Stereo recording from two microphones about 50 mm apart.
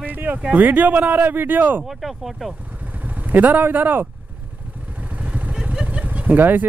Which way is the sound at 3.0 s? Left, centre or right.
Right.